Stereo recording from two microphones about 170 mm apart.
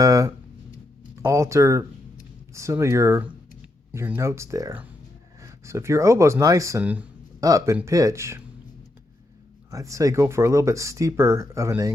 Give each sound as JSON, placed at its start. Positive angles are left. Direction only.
{"t": 0.0, "sound": "a sound", "side_deg": -20}
{"t": 1.1, "sound": "speech", "side_deg": -15}
{"t": 9.7, "sound": "speech", "side_deg": -20}